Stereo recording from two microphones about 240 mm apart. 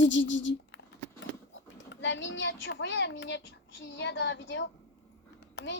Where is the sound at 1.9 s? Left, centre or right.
Left.